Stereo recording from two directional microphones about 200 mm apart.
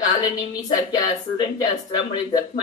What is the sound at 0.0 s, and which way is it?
A woman's voice, 20° left (ahead or behind).